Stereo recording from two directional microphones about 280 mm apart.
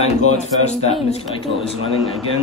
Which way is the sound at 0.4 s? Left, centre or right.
Left.